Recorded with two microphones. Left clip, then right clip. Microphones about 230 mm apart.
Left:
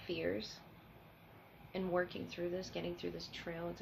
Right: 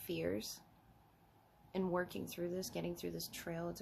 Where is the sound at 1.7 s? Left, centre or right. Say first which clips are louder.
Left 2 dB; right.